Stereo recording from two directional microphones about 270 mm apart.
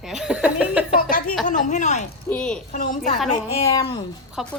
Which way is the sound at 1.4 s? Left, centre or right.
Left.